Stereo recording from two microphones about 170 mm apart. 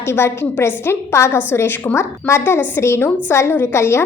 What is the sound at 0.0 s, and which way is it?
A woman's voice, 15° left (ahead or behind).